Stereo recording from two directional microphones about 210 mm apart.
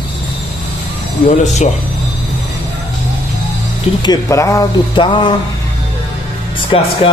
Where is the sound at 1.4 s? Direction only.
35° left (ahead or behind).